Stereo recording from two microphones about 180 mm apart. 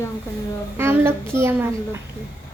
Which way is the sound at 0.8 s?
15° right (ahead or behind).